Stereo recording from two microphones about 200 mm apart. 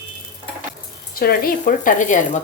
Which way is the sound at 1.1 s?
50° left (ahead or behind).